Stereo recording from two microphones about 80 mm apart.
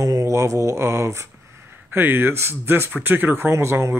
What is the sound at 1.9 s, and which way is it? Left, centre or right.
Speech, right.